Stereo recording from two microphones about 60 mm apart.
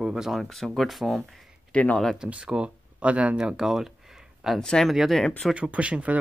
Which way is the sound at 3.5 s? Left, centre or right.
Centre.